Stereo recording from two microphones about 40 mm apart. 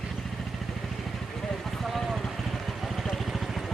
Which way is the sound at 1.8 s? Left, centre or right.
Centre.